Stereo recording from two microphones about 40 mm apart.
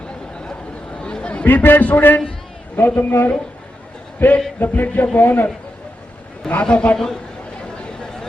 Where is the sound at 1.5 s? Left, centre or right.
Left.